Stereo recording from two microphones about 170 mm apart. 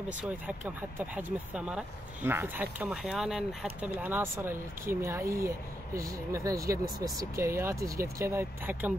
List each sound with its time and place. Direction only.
0.2 s speech: 10° right (ahead or behind)